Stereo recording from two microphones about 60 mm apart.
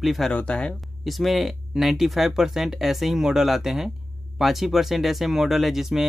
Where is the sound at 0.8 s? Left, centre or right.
Centre.